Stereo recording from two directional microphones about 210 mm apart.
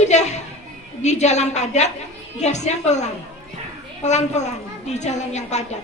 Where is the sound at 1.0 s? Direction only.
35° left (ahead or behind).